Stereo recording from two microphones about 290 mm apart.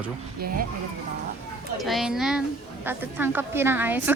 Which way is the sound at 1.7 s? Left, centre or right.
Centre.